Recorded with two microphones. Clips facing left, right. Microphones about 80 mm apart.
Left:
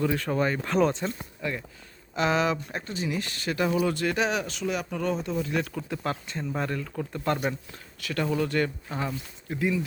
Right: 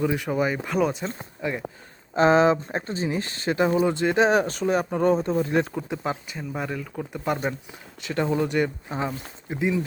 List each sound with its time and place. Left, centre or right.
0.0 s speech: centre
1.0 s speech: right
2.1 s speech: right
4.3 s speech: right; by 7.3 s centre
7.7 s speech: right